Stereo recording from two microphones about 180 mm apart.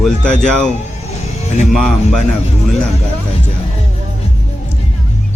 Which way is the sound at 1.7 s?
Centre (ahead or behind).